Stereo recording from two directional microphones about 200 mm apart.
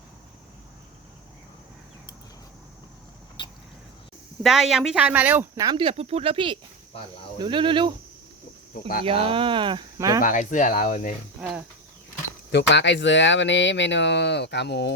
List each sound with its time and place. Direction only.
3.4 s a sound: 25° left (ahead or behind)
4.4 s speech: centre (ahead or behind); by 7.9 s 25° right (ahead or behind)
9.0 s speech: 25° right (ahead or behind)
10.2 s speech: 40° left (ahead or behind)
11.3 s speech: 5° right (ahead or behind)
12.5 s speech: 60° left (ahead or behind)